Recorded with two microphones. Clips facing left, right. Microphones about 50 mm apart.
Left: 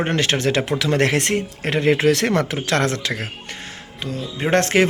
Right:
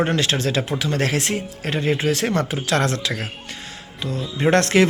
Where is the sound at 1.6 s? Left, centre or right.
Left.